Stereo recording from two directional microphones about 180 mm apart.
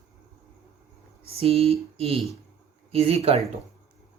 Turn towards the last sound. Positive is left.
turn(degrees=-35)  # may be behind; listen again after turning